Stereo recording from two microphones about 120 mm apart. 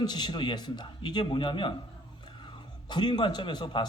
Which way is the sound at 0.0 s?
35° left (ahead or behind).